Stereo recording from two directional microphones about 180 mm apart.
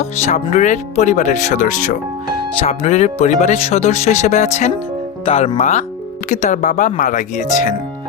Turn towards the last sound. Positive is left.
turn(degrees=45)  # may be behind; listen again after turning